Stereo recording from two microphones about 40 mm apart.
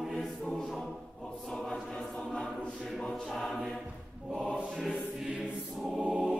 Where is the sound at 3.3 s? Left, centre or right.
Centre.